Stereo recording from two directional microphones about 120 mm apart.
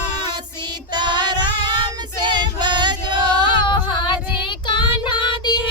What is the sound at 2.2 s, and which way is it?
Choir, 40° right (ahead or behind).